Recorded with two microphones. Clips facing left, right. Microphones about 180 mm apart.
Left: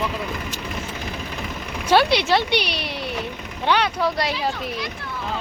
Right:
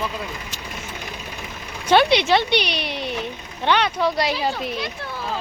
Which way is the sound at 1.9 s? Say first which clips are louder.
Right 1 dB; 5° left (ahead or behind).